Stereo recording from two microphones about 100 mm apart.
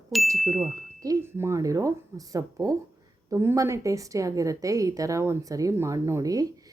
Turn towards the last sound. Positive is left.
turn(degrees=-35)  # may be behind; listen again after turning